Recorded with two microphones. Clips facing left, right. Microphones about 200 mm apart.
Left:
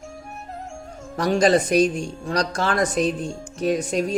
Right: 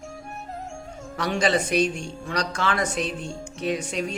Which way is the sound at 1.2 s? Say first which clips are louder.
Left 6 dB; 40° left (ahead or behind).